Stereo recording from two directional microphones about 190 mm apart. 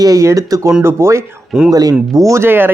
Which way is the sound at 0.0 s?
15° right (ahead or behind).